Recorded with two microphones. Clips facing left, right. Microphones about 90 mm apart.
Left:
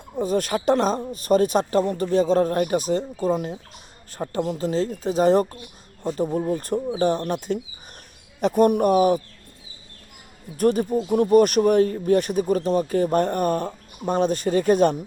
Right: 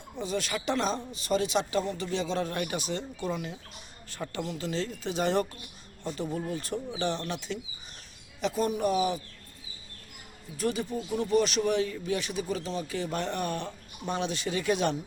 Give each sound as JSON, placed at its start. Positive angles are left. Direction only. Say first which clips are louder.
{"t": 0.2, "sound": "speech", "louder": "left 9 dB", "side_deg": 45}
{"t": 6.2, "sound": "speech", "louder": "left 9 dB", "side_deg": 30}
{"t": 6.5, "sound": "a man's voice", "louder": "left 9 dB", "side_deg": 50}
{"t": 10.6, "sound": "speech", "louder": "left 10 dB", "side_deg": 50}